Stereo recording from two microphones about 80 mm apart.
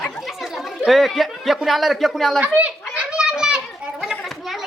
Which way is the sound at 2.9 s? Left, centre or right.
Centre.